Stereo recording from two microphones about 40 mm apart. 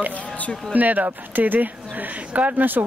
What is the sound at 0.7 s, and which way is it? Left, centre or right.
Speech, right.